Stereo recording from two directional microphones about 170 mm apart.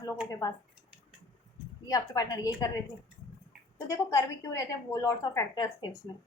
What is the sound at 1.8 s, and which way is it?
Speech, 20° left (ahead or behind).